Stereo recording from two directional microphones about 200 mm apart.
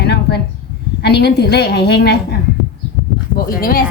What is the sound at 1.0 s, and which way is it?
A woman's voice, 55° left (ahead or behind).